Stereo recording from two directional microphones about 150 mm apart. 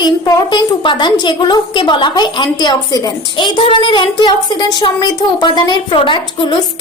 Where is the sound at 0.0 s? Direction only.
30° left (ahead or behind).